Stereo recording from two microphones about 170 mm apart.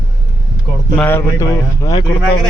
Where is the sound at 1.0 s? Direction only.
15° left (ahead or behind).